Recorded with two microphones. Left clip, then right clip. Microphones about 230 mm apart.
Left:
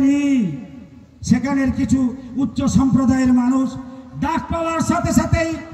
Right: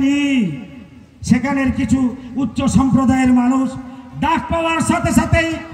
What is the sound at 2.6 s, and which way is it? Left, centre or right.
A man's voice, left.